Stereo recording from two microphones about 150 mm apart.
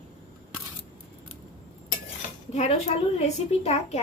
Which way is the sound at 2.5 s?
45° left (ahead or behind).